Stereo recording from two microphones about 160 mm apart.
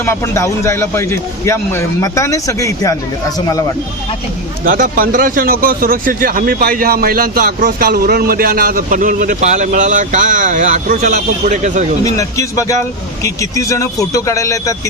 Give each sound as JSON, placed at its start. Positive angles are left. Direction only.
{"t": 0.0, "sound": "a man's voice", "side_deg": 15}
{"t": 4.6, "sound": "speech", "side_deg": -60}
{"t": 12.0, "sound": "a man's voice", "side_deg": 20}